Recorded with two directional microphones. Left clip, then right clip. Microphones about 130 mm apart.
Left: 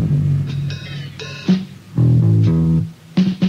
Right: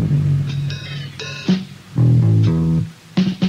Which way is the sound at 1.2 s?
40° left (ahead or behind).